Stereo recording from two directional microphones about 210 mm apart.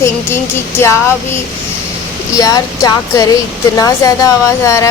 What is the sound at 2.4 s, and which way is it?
Speech, 15° left (ahead or behind).